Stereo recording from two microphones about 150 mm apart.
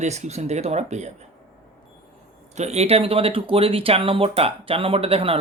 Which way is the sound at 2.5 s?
45° right (ahead or behind).